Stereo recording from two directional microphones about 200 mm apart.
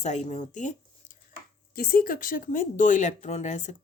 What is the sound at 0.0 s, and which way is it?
Speech, 35° left (ahead or behind).